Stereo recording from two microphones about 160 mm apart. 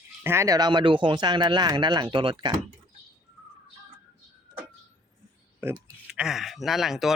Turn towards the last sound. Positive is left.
turn(degrees=0)  # may be behind; listen again after turning